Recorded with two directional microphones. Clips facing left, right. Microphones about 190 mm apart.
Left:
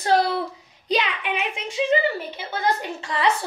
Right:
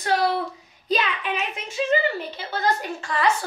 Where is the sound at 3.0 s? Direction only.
25° left (ahead or behind).